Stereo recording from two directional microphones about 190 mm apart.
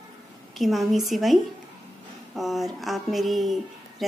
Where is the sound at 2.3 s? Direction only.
Centre (ahead or behind).